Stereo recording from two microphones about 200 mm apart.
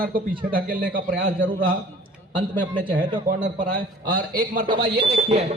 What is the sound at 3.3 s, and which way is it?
Speech, 50° right (ahead or behind).